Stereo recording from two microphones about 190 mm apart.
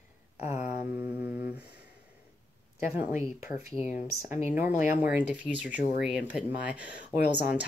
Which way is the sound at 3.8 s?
40° left (ahead or behind).